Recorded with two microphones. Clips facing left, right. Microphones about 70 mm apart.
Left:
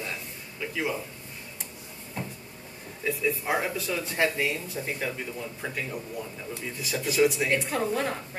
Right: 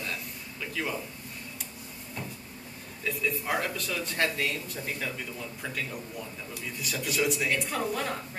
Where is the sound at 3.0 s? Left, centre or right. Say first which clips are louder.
Left 3 dB; centre.